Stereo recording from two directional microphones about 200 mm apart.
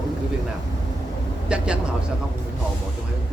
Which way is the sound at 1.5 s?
5° right (ahead or behind).